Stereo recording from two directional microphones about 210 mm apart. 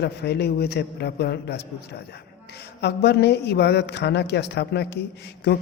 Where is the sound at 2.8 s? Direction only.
50° left (ahead or behind).